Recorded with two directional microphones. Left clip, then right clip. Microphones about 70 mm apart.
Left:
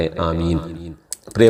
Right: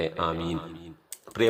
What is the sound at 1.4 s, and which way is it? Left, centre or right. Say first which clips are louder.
Speech: left 11 dB; left.